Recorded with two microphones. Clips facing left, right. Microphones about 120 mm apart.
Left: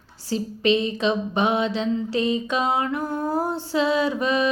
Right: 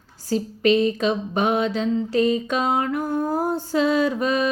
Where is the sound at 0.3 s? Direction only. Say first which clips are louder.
Right 2 dB; 45° right (ahead or behind).